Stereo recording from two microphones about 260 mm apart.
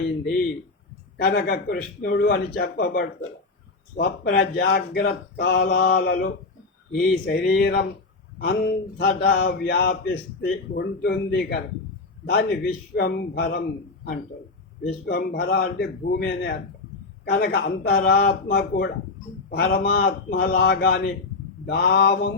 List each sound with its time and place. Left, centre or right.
1.1 s a man's voice: left